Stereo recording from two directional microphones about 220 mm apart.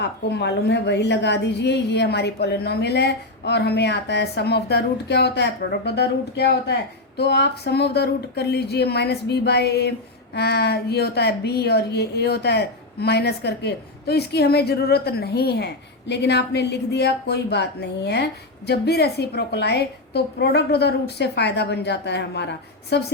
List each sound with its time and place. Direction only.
0.0 s a woman's voice: 50° left (ahead or behind)